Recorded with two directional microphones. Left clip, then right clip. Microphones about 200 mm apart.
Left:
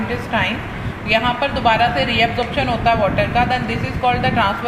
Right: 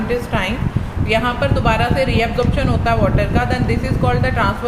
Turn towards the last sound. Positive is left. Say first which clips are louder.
# left 1 dB
turn(degrees=-30)  # may be behind; listen again after turning